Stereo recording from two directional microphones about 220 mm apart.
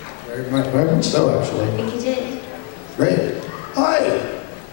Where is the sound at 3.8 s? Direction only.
20° left (ahead or behind).